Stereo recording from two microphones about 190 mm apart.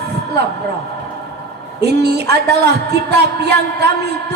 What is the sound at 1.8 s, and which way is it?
Speech, 60° right (ahead or behind).